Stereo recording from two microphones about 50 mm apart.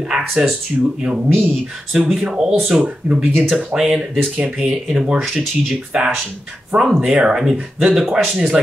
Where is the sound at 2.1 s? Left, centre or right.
Centre.